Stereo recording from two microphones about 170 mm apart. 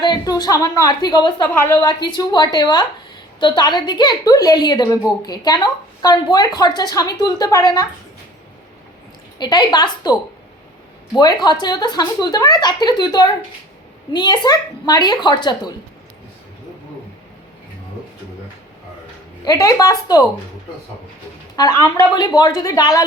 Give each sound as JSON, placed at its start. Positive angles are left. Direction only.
{"t": 0.0, "sound": "a woman's voice", "side_deg": 25}
{"t": 1.5, "sound": "a woman's voice", "side_deg": 10}
{"t": 1.8, "sound": "a woman's voice", "side_deg": 25}
{"t": 9.4, "sound": "a woman's voice", "side_deg": 25}
{"t": 19.5, "sound": "a woman's voice", "side_deg": 20}
{"t": 21.5, "sound": "a woman's voice", "side_deg": 20}